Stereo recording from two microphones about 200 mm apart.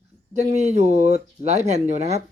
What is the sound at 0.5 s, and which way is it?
Speech, 35° right (ahead or behind).